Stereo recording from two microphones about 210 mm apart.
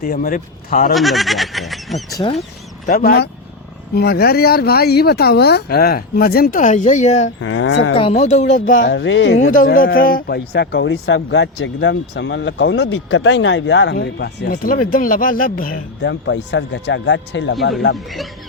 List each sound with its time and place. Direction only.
0.0 s speech: 40° left (ahead or behind)
0.9 s speech: centre (ahead or behind)
2.1 s speech: 25° left (ahead or behind)
2.8 s speech: 40° left (ahead or behind)
7.4 s speech: 65° left (ahead or behind)
7.9 s speech: 30° left (ahead or behind)
8.9 s speech: 60° left (ahead or behind)
9.6 s speech: 45° left (ahead or behind)
16.0 s speech: 55° left (ahead or behind)